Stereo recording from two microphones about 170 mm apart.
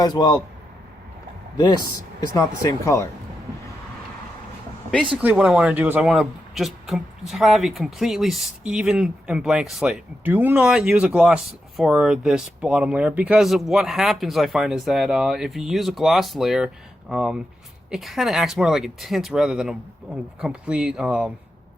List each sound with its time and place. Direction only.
0.0 s speech: 25° left (ahead or behind)
1.5 s speech: 25° left (ahead or behind)
4.9 s speech: 5° left (ahead or behind)
5.2 s speech: 10° right (ahead or behind)